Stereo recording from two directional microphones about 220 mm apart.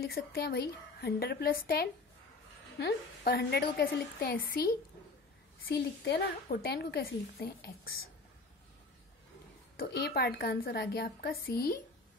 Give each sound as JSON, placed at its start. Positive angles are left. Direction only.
{"t": 0.0, "sound": "a woman's voice", "side_deg": 45}
{"t": 5.6, "sound": "a woman's voice", "side_deg": 45}
{"t": 9.8, "sound": "a woman's voice", "side_deg": 45}